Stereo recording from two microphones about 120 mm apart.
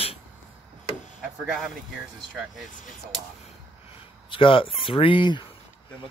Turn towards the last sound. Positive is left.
turn(degrees=45)  # may be behind; listen again after turning